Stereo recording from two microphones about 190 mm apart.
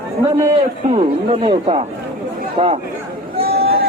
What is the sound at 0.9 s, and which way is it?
A man's voice, 30° right (ahead or behind).